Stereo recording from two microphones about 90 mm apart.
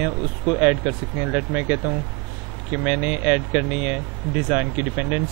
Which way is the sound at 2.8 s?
10° right (ahead or behind).